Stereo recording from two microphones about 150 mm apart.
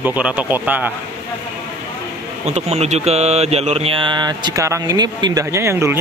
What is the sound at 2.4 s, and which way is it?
Mantra, 45° right (ahead or behind).